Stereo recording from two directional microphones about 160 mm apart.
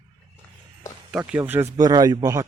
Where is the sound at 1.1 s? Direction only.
10° right (ahead or behind).